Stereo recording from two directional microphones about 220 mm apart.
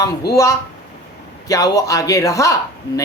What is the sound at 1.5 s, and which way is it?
Speech, 15° left (ahead or behind).